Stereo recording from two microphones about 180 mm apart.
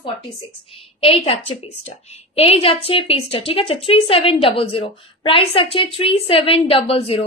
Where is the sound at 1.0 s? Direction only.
30° left (ahead or behind).